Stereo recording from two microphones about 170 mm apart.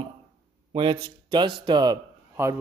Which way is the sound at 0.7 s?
30° right (ahead or behind).